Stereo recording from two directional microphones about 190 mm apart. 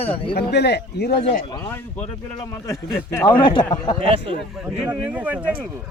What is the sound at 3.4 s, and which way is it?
Speech, 25° left (ahead or behind).